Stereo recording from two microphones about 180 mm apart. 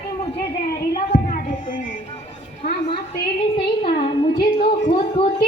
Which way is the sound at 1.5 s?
45° left (ahead or behind).